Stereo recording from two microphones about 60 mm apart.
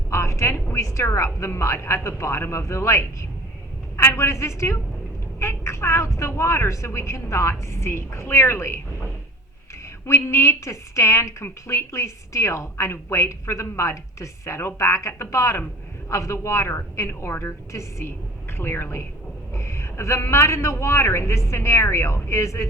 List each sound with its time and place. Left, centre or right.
0.1 s a woman's voice: left
10.1 s a woman's voice: left
18.5 s a woman's voice: left